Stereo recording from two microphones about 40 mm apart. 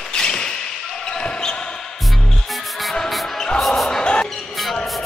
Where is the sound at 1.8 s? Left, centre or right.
Centre.